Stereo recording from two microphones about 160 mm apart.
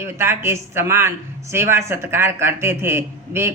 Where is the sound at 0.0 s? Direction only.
15° right (ahead or behind).